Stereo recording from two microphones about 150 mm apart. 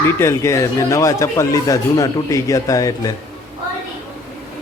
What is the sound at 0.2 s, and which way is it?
Speech, 20° left (ahead or behind).